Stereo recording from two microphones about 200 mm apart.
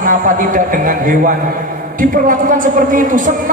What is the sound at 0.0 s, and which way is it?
Speech, 40° right (ahead or behind).